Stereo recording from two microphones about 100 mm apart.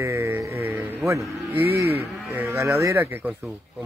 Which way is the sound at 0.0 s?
25° right (ahead or behind).